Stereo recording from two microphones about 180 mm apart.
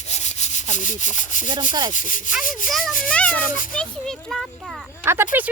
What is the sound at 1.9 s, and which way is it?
Speech, 45° left (ahead or behind).